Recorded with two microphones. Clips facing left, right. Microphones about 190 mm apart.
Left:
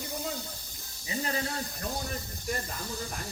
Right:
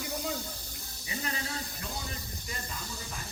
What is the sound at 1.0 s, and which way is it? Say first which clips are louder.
Speech: left 5 dB; 35° left (ahead or behind).